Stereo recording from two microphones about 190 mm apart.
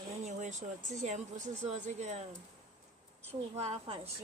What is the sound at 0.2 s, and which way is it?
Speech, 40° right (ahead or behind).